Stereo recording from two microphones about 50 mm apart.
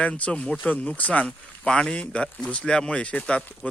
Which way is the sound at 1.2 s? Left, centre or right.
Centre.